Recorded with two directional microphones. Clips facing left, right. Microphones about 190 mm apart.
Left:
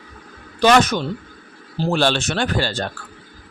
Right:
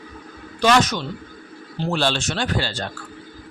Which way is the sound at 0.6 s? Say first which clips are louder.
Left 3 dB; 55° left (ahead or behind).